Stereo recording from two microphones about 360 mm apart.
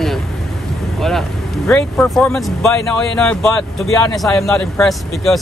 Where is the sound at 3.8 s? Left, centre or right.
Centre.